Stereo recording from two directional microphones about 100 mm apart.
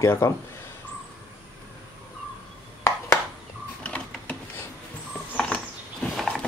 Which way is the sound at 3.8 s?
15° left (ahead or behind).